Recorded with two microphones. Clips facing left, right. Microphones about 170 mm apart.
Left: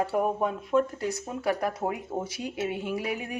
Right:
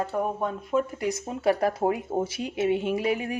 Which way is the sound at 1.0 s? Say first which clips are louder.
Right 4 dB; 20° right (ahead or behind).